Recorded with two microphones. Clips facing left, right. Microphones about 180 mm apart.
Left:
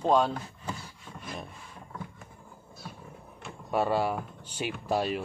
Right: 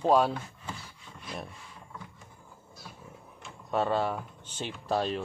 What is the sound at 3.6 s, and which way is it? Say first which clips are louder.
Speech: left 1 dB; 10° left (ahead or behind).